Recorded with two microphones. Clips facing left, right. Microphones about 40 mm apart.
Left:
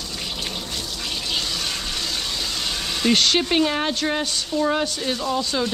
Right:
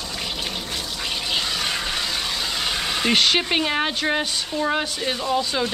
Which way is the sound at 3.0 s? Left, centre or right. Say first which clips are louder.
Left 1 dB; centre.